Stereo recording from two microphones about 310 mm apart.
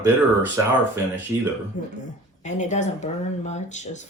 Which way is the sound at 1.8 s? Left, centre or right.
Left.